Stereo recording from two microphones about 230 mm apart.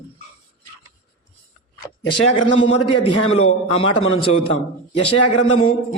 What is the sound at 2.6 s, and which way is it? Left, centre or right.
Speech, left.